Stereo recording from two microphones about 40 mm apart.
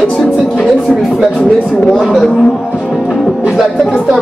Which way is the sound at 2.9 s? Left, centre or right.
Centre.